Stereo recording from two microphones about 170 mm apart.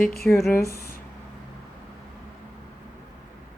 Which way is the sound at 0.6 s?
65° left (ahead or behind).